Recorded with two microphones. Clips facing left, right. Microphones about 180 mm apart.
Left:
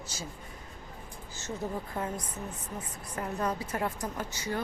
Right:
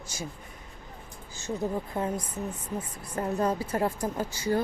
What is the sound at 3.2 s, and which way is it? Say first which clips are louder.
A woman's voice: right 5 dB; 30° right (ahead or behind).